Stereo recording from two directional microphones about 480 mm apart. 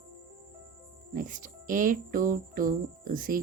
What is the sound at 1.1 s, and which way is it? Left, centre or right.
Music, centre.